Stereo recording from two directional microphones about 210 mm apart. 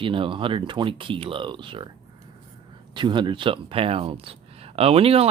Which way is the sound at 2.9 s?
20° right (ahead or behind).